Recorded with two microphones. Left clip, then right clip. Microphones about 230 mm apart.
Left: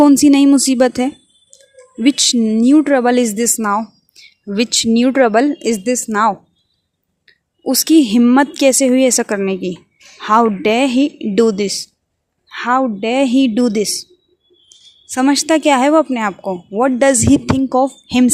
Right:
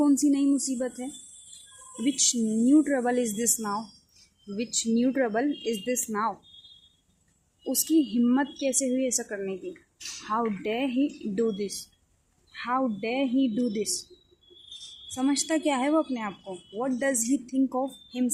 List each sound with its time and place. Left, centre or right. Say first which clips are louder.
0.0 s a woman's voice: left 14 dB; left
7.6 s a woman's voice: left 13 dB; left
15.1 s a woman's voice: left 14 dB; left